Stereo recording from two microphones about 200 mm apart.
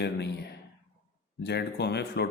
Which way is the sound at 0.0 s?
55° left (ahead or behind).